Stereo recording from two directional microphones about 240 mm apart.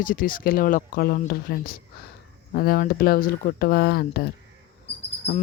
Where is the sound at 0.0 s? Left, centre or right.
Left.